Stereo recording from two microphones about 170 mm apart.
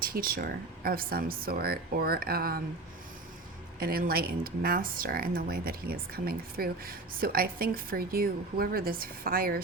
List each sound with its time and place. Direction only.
0.0 s speech: 60° right (ahead or behind)
3.8 s speech: 60° right (ahead or behind)